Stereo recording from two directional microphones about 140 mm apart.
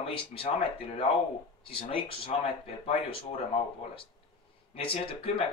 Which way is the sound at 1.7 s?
40° left (ahead or behind).